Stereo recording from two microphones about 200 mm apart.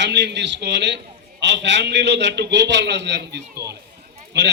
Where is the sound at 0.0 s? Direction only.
60° right (ahead or behind).